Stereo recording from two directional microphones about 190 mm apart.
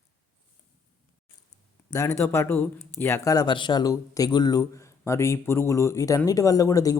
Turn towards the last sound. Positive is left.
turn(degrees=20)  # may be behind; listen again after turning